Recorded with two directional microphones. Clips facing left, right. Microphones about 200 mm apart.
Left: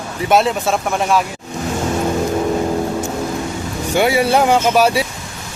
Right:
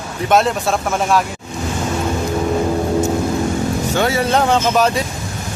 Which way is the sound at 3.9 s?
10° left (ahead or behind).